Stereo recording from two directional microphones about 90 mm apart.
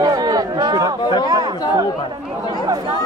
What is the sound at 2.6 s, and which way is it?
Speech, 50° right (ahead or behind).